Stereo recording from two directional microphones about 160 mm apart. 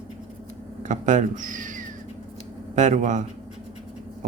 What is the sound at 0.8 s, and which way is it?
Cat, 50° right (ahead or behind).